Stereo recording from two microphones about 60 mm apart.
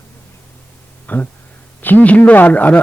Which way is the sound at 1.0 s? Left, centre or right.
Left.